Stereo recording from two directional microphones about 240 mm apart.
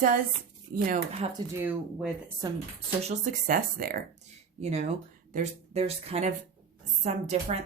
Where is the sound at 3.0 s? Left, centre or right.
Right.